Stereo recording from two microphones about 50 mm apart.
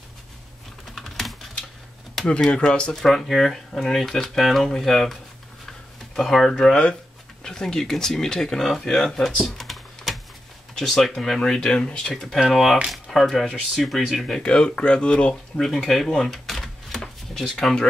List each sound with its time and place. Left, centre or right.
0.9 s typing: centre
2.5 s speech: centre
2.9 s speech: centre
6.1 s speech: centre
6.7 s speech: centre
9.4 s computer keyboard: centre
10.8 s speech: centre
12.4 s speech: centre
14.4 s speech: left
15.6 s a sound: centre
17.3 s speech: centre